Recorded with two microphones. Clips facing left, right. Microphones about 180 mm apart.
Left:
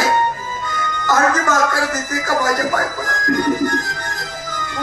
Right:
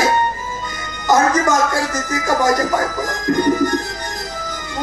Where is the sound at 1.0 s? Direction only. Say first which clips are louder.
Right 3 dB; 15° right (ahead or behind).